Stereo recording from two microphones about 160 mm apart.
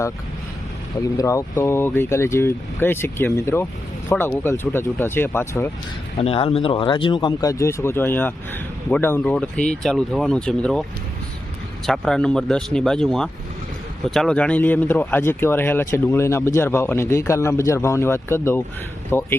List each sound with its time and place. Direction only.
1.1 s speech: 20° left (ahead or behind)
6.1 s speech: 35° left (ahead or behind); by 10.8 s 5° left (ahead or behind)
11.9 s speech: 5° left (ahead or behind)